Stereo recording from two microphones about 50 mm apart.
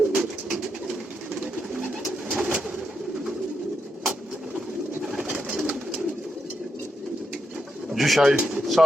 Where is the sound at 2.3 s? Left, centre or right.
Right.